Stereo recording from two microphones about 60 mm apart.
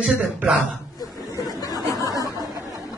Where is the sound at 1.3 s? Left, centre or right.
Left.